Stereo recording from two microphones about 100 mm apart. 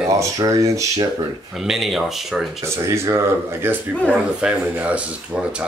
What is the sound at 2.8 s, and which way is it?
Speech, 30° right (ahead or behind).